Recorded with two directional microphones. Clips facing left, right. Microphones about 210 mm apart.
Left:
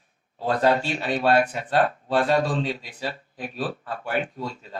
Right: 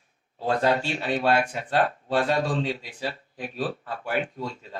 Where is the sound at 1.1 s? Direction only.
35° left (ahead or behind).